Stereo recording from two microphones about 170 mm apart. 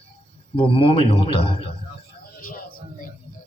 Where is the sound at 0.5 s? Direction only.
35° left (ahead or behind).